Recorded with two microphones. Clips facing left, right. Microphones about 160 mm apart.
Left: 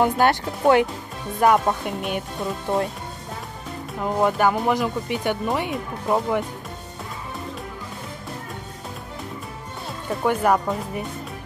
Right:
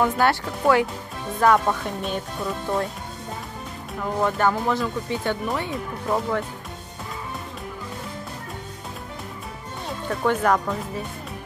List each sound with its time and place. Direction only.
0.0 s speech: 20° left (ahead or behind)
4.0 s speech: 15° left (ahead or behind)
10.0 s speech: 10° left (ahead or behind)